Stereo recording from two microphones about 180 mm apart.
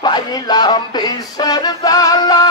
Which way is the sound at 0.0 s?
25° left (ahead or behind).